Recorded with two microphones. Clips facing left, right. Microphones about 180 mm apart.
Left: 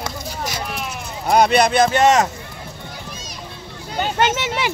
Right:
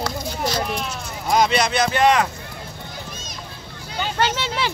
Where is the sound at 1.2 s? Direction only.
60° left (ahead or behind); by 2.2 s 45° left (ahead or behind).